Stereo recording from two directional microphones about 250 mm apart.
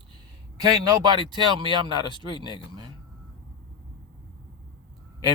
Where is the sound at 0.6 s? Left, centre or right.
Centre.